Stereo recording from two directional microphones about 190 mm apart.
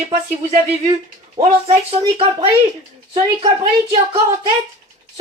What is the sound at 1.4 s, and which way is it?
Speech, 30° right (ahead or behind).